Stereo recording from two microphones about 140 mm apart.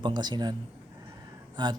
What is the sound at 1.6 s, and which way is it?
Speech, 30° right (ahead or behind).